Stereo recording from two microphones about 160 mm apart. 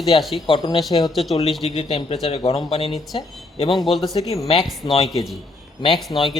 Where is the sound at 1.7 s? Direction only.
35° left (ahead or behind).